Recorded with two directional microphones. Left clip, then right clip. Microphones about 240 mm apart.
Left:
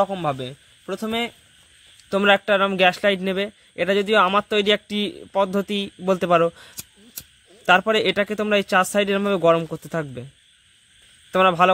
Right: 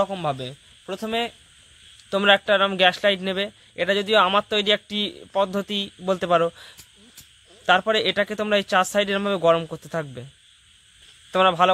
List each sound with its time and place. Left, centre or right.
0.0 s a man's voice: left
11.3 s a man's voice: left